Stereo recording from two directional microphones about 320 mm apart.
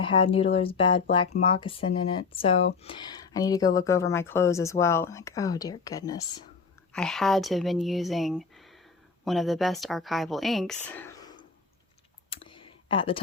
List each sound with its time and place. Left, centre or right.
0.0 s speech: centre
10.8 s a sound: centre
12.3 s clicking: centre